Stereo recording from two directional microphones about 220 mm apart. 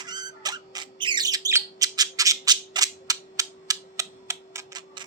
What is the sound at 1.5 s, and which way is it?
Bird, 15° right (ahead or behind).